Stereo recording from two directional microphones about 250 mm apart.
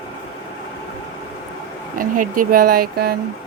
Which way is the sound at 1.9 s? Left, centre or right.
Right.